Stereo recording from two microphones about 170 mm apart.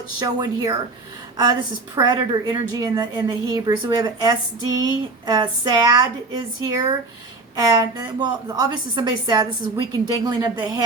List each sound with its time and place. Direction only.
0.2 s a woman's voice: 20° right (ahead or behind)